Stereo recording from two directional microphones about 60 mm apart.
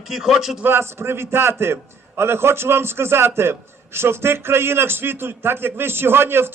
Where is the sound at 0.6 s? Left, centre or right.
Right.